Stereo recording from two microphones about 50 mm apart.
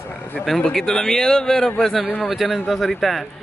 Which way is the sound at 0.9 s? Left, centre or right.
Centre.